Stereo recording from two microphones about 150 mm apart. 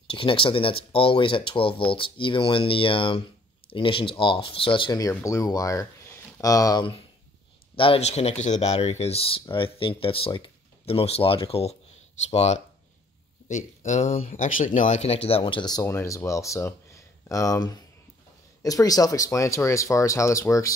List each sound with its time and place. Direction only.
0.0 s speech: 35° left (ahead or behind)